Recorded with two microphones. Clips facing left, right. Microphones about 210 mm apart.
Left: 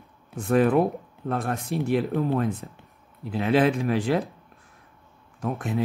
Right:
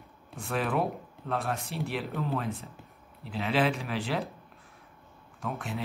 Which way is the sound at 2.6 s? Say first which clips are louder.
Left 6 dB; 60° left (ahead or behind).